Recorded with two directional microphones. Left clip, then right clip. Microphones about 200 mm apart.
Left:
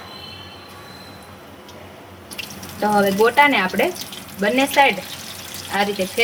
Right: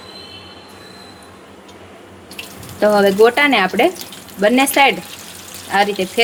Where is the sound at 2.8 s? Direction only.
50° right (ahead or behind).